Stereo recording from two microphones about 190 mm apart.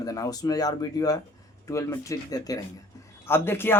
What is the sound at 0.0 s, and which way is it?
Speech, 20° left (ahead or behind).